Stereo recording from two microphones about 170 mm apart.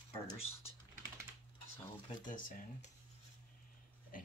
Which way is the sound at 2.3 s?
50° left (ahead or behind).